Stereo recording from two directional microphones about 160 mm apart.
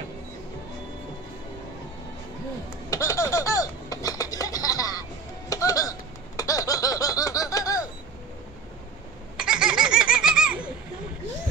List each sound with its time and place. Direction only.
2.9 s a sound: 20° left (ahead or behind)
5.5 s laughter: 20° left (ahead or behind)
9.4 s laughter: 5° right (ahead or behind)